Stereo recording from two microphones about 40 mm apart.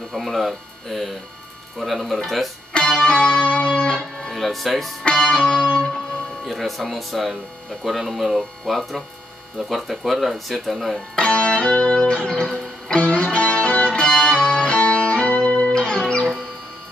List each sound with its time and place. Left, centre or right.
0.1 s speech: centre
2.7 s music: left
4.3 s speech: centre
5.0 s music: centre
5.9 s speech: centre
11.1 s music: left